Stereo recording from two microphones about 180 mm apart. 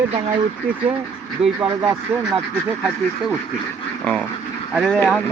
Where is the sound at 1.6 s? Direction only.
15° right (ahead or behind).